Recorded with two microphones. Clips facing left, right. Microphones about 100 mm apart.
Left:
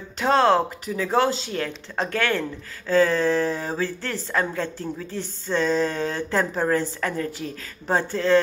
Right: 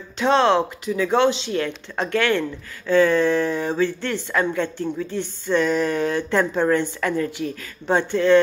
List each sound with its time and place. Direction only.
0.2 s speech: 40° left (ahead or behind)